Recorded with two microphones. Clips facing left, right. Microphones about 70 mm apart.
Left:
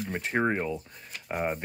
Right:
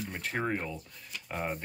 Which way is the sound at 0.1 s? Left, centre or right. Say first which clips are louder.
Left 6 dB; left.